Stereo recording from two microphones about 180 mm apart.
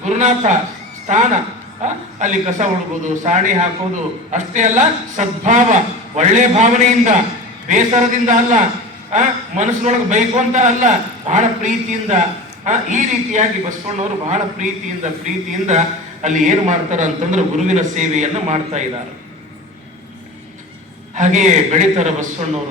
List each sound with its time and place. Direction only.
0.0 s a man's voice: 40° right (ahead or behind)
21.2 s a man's voice: 40° right (ahead or behind)